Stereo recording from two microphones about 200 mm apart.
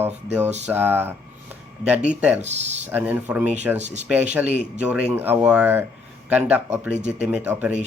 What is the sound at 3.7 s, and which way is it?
Speech, 35° right (ahead or behind).